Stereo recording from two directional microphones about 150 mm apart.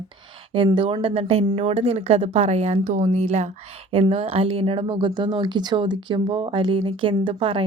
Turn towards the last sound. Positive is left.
turn(degrees=-35)  # may be behind; listen again after turning